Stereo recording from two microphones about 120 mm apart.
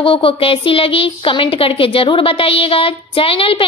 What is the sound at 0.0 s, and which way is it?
A woman's voice, 50° left (ahead or behind).